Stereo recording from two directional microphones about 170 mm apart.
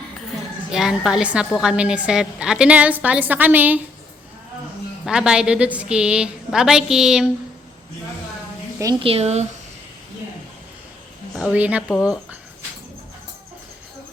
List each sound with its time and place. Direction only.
0.7 s a woman's voice: 5° right (ahead or behind)
5.0 s a woman's voice: 5° right (ahead or behind)
8.8 s a woman's voice: 25° right (ahead or behind)
11.3 s a woman's voice: 5° right (ahead or behind)